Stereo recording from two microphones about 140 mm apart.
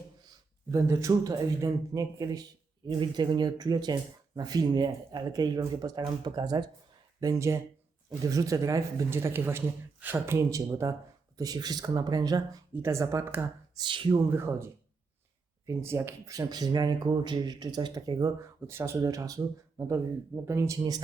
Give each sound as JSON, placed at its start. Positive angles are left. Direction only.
{"t": 0.7, "sound": "speech", "side_deg": -25}
{"t": 13.7, "sound": "speech", "side_deg": -35}
{"t": 14.3, "sound": "speech", "side_deg": -15}